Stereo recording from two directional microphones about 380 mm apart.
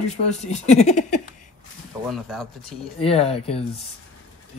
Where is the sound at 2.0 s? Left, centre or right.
Centre.